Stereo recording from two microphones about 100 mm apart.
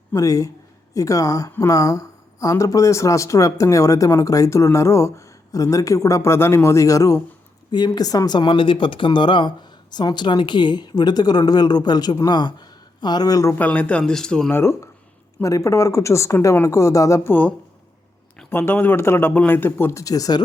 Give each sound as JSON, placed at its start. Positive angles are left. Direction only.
{"t": 0.1, "sound": "a woman's voice", "side_deg": 35}
{"t": 7.7, "sound": "speech", "side_deg": 45}
{"t": 13.6, "sound": "speech", "side_deg": 15}
{"t": 14.5, "sound": "a woman's voice", "side_deg": 25}
{"t": 18.5, "sound": "speech", "side_deg": 20}